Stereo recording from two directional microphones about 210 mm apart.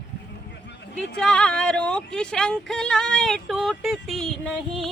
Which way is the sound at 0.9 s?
5° left (ahead or behind).